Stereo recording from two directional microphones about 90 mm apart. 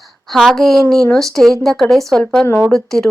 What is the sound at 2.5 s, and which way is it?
Speech, 25° left (ahead or behind).